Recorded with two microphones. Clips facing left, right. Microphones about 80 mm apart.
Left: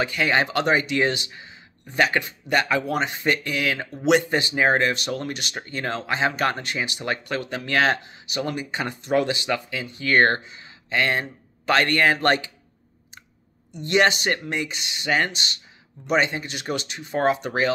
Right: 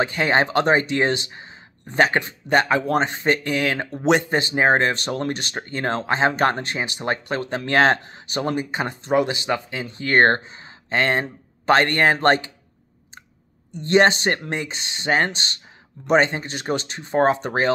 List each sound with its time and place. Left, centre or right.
0.0 s speech: right
8.5 s speech: right
13.7 s speech: right